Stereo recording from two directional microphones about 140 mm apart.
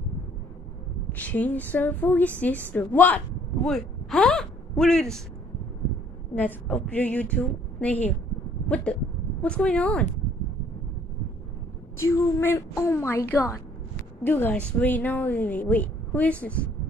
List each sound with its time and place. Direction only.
1.1 s a woman's voice: 10° left (ahead or behind)
3.6 s a sound: 5° left (ahead or behind)
6.3 s a woman's voice: 10° left (ahead or behind)
8.6 s a sound: 10° left (ahead or behind)
9.4 s a woman's voice: 10° left (ahead or behind)
12.0 s a woman's voice: 20° left (ahead or behind)